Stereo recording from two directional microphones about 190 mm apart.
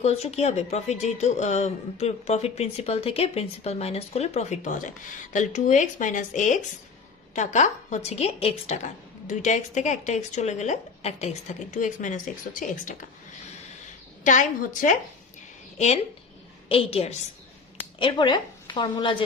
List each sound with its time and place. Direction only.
0.0 s a woman's voice: 35° left (ahead or behind)
14.3 s a woman's voice: 40° left (ahead or behind); by 19.1 s 20° left (ahead or behind)